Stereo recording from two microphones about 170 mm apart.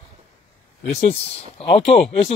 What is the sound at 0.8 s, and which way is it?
Speech, 35° left (ahead or behind).